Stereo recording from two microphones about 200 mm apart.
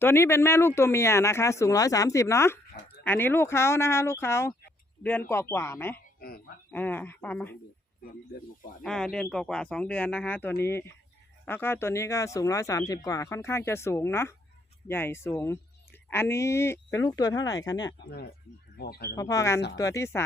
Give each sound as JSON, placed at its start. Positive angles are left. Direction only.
{"t": 0.0, "sound": "speech", "side_deg": 10}
{"t": 6.0, "sound": "a sound", "side_deg": 50}
{"t": 6.7, "sound": "speech", "side_deg": 10}
{"t": 8.8, "sound": "speech", "side_deg": 5}
{"t": 18.8, "sound": "speech", "side_deg": 50}
{"t": 19.1, "sound": "speech", "side_deg": 15}